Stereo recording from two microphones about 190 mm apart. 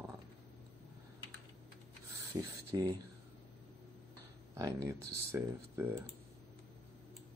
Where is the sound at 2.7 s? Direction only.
15° right (ahead or behind).